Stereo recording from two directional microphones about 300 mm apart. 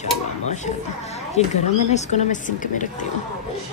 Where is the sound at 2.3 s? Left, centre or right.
Left.